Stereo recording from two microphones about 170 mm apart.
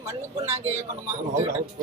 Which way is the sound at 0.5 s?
40° right (ahead or behind).